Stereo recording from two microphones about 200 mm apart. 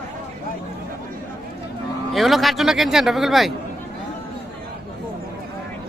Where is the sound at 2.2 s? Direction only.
Centre (ahead or behind).